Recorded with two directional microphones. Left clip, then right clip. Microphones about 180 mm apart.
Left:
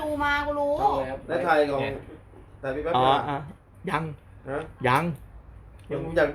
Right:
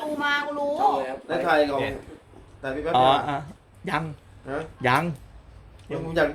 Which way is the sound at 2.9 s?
20° right (ahead or behind).